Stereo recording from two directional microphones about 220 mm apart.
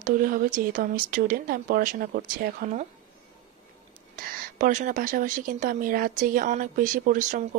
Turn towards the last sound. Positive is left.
turn(degrees=-35)  # may be behind; listen again after turning